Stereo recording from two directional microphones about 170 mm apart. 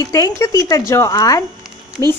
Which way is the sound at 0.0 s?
20° left (ahead or behind).